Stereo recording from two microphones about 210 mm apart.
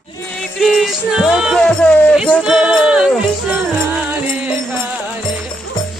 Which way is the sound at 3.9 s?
5° right (ahead or behind).